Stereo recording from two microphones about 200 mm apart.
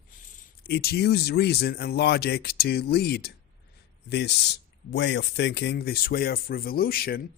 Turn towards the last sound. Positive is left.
turn(degrees=50)  # may be behind; listen again after turning